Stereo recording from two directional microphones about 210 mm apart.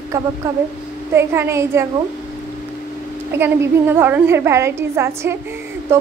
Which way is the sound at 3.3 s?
10° right (ahead or behind).